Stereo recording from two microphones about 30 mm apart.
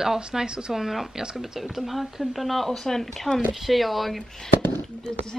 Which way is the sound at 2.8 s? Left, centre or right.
Centre.